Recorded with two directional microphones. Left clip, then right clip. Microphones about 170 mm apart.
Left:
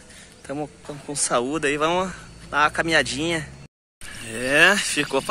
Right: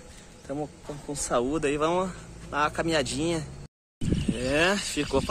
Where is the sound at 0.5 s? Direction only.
25° left (ahead or behind).